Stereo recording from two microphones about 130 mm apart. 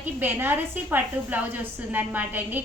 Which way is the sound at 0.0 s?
15° right (ahead or behind).